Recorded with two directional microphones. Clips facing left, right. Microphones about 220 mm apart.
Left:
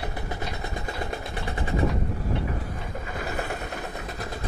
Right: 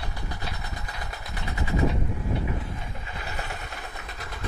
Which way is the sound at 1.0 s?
30° left (ahead or behind).